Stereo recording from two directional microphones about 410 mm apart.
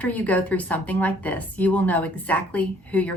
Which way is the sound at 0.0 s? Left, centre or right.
Centre.